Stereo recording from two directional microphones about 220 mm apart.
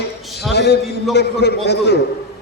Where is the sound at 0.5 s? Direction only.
50° left (ahead or behind).